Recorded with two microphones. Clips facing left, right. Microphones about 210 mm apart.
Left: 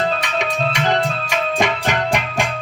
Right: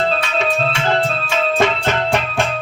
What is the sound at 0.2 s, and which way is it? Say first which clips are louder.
Music: right 2 dB; 15° left (ahead or behind).